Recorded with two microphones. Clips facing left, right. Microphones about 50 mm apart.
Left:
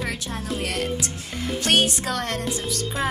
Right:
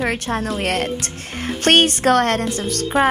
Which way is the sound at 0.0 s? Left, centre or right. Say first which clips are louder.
Right 8 dB; right.